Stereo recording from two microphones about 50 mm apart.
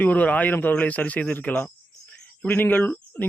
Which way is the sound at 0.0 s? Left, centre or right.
Left.